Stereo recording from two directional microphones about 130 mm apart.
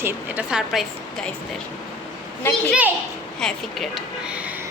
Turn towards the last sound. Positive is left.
turn(degrees=0)  # may be behind; listen again after turning